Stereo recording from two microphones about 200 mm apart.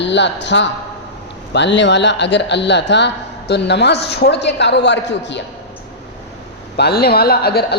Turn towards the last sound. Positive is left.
turn(degrees=50)  # may be behind; listen again after turning